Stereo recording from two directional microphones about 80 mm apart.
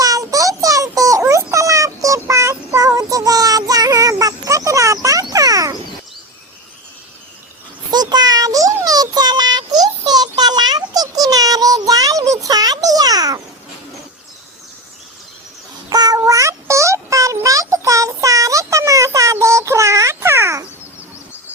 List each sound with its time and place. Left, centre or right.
0.0 s child singing: right
7.9 s child singing: right
15.9 s a sound: right
17.4 s synthetic singing: right